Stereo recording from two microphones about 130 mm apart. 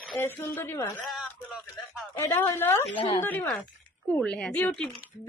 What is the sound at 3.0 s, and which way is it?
Speech, 40° left (ahead or behind).